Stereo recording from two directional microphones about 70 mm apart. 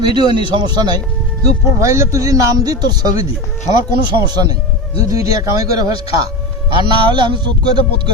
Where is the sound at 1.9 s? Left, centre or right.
Right.